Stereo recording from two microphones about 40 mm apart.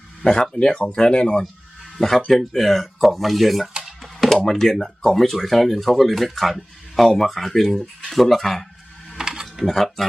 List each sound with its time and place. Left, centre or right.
0.2 s speech: left
1.8 s a sound: centre
2.5 s speech: centre
3.8 s a sound: centre
4.4 s speech: centre
9.1 s mechanisms: centre
9.6 s speech: centre